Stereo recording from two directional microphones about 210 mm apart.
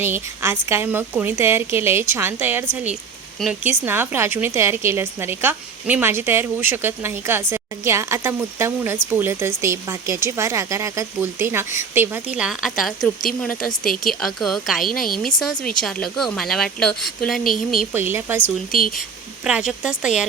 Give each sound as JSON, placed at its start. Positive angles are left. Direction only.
{"t": 0.0, "sound": "a woman's voice", "side_deg": -10}
{"t": 13.8, "sound": "speech", "side_deg": 40}
{"t": 14.1, "sound": "speech", "side_deg": 0}
{"t": 17.9, "sound": "a woman's voice", "side_deg": -10}
{"t": 18.7, "sound": "speech", "side_deg": 40}
{"t": 19.5, "sound": "speech", "side_deg": -5}